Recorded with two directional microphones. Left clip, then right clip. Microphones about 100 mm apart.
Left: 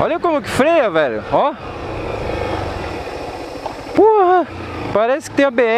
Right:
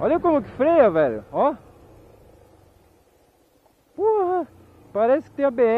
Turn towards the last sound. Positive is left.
turn(degrees=15)  # may be behind; listen again after turning